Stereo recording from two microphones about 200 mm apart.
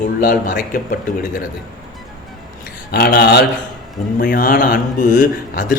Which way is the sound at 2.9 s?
50° left (ahead or behind).